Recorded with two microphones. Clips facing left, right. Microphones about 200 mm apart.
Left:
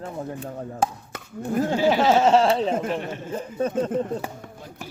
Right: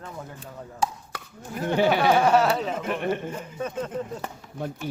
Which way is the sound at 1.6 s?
60° right (ahead or behind).